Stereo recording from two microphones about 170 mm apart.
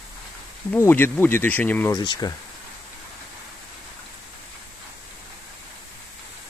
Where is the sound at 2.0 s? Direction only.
25° left (ahead or behind).